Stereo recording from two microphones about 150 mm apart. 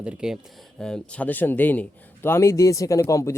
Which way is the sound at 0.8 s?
5° left (ahead or behind).